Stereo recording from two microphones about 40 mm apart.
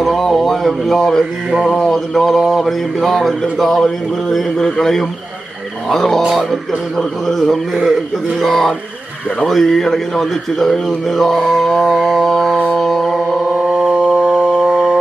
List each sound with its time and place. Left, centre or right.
0.0 s a sound: centre
1.7 s mantra: centre
12.7 s music: centre
13.6 s music: right